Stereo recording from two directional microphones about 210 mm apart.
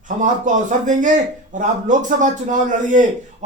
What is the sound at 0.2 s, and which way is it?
A man's voice, 35° right (ahead or behind).